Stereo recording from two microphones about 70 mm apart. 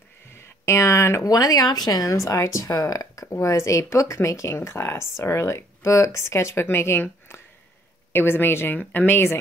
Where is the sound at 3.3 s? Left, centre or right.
Left.